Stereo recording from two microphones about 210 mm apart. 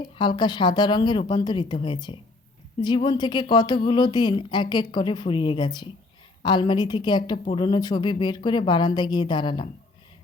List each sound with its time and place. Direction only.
0.2 s a woman's voice: 20° left (ahead or behind)